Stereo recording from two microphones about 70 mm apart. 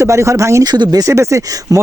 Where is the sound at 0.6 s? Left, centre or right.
Right.